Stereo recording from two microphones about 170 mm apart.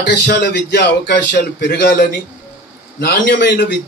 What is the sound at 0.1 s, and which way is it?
Speech, 85° left.